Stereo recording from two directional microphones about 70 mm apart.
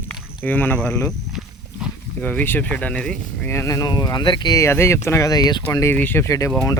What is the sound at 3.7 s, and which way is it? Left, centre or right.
Speech, left.